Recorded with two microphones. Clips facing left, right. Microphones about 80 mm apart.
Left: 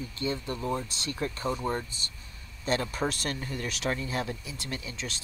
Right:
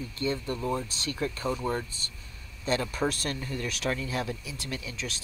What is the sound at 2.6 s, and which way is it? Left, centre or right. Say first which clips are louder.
Speech: right 1 dB; left.